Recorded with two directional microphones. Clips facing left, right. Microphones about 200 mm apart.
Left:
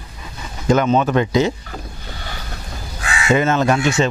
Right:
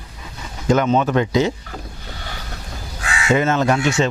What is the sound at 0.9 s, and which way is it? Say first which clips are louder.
Speech: left 1 dB; 20° left (ahead or behind).